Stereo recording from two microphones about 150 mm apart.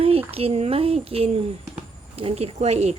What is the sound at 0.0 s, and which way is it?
Speech, 40° right (ahead or behind).